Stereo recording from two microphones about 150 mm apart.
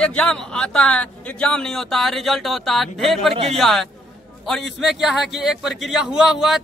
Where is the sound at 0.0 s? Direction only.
5° left (ahead or behind).